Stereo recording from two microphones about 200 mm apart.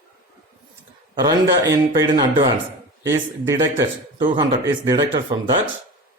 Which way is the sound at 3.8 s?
25° right (ahead or behind).